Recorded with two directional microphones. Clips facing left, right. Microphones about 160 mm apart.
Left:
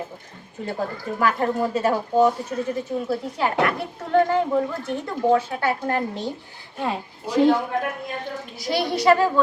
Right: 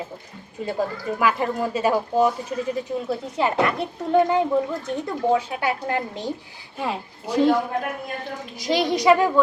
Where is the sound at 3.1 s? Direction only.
20° right (ahead or behind).